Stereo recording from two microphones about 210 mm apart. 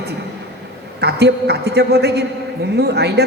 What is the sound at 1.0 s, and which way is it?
A woman's voice, 50° right (ahead or behind).